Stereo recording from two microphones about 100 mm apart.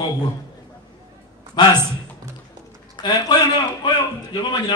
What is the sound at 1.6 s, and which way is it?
Speech, 45° left (ahead or behind).